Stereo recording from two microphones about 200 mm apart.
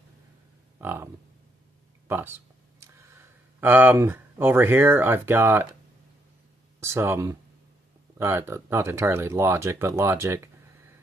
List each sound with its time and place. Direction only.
0.7 s speech: 10° right (ahead or behind)
2.0 s speech: 10° right (ahead or behind)
6.8 s speech: 15° right (ahead or behind)